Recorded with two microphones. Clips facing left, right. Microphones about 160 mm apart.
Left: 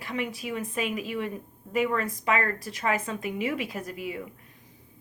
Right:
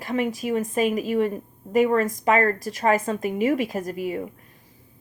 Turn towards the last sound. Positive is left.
turn(degrees=-45)  # may be behind; listen again after turning